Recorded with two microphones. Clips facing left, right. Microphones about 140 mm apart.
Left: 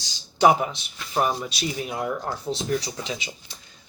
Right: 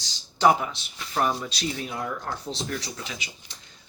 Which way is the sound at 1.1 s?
10° left (ahead or behind).